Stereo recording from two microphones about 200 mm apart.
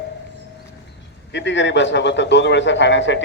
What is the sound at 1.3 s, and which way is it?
A man's voice, 65° left (ahead or behind).